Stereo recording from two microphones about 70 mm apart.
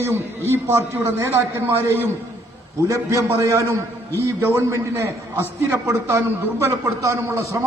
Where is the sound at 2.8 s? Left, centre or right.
Right.